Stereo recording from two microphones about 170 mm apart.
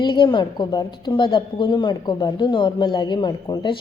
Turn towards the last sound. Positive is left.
turn(degrees=25)  # may be behind; listen again after turning